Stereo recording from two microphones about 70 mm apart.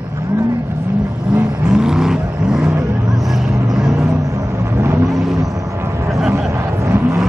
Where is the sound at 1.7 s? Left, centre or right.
Centre.